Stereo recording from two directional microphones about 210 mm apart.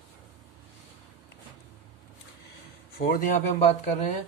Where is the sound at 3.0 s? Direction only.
45° left (ahead or behind).